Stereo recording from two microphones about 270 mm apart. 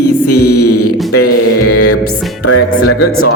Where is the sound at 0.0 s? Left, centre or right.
Left.